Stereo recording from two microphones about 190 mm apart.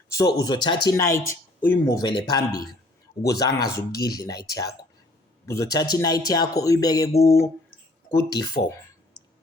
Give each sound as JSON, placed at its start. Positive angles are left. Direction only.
{"t": 0.1, "sound": "a man's voice", "side_deg": 15}